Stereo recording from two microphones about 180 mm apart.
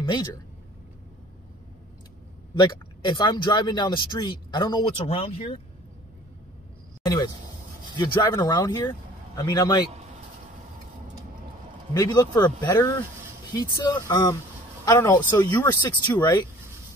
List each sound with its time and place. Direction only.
0.0 s speech: 25° left (ahead or behind)
2.5 s speech: 25° left (ahead or behind)
8.0 s speech: 20° left (ahead or behind)
11.9 s speech: 20° left (ahead or behind)